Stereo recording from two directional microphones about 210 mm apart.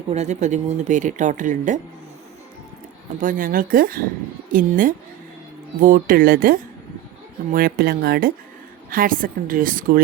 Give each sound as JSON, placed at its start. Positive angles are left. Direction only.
{"t": 0.1, "sound": "speech", "side_deg": -35}
{"t": 3.2, "sound": "speech", "side_deg": -40}